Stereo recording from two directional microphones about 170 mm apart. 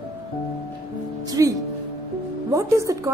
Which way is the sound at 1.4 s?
20° right (ahead or behind).